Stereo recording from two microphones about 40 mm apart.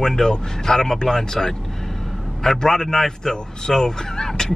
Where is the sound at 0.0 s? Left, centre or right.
Centre.